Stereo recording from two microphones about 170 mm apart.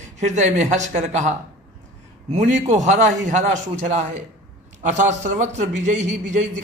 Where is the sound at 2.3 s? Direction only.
45° right (ahead or behind).